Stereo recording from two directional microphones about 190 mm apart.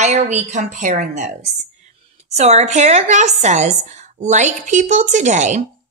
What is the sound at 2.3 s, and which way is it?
A woman's voice, 35° right (ahead or behind).